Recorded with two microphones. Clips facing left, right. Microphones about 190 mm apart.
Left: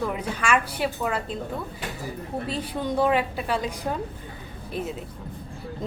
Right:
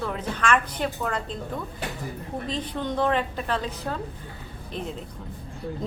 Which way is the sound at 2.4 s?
10° left (ahead or behind).